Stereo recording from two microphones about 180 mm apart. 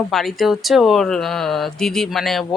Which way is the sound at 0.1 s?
Centre (ahead or behind).